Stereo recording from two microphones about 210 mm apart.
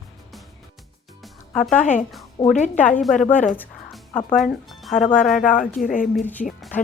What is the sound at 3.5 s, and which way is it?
Music, 10° left (ahead or behind).